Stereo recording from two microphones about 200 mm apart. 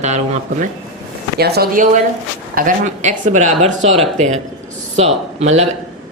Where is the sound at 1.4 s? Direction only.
55° right (ahead or behind); by 3.7 s 35° right (ahead or behind).